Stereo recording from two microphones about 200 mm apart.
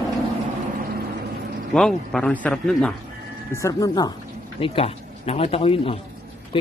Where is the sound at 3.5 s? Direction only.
15° left (ahead or behind).